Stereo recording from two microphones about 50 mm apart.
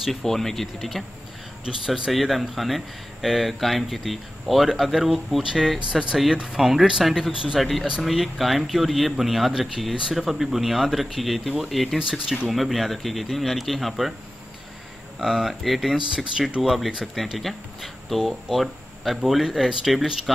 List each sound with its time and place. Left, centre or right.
0.0 s speech: centre
5.4 s speech: centre
6.6 s speech: centre
12.0 s speech: centre
12.4 s speech: centre
15.1 s speech: centre